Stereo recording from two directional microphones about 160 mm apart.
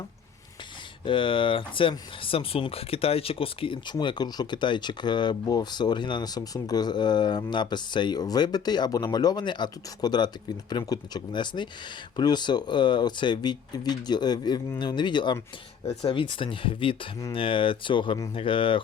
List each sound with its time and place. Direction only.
1.0 s speech: 30° left (ahead or behind)